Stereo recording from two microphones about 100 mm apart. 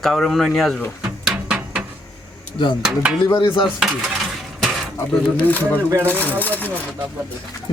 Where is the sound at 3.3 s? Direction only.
50° left (ahead or behind).